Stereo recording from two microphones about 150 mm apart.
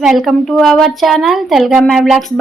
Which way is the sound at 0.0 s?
Centre (ahead or behind).